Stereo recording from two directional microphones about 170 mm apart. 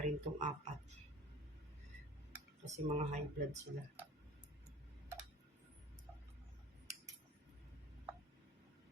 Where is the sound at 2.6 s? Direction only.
45° right (ahead or behind).